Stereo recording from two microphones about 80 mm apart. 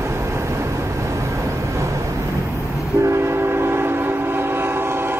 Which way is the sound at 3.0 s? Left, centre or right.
Right.